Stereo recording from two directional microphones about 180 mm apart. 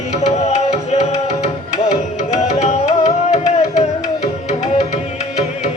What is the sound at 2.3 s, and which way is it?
Music, 40° left (ahead or behind).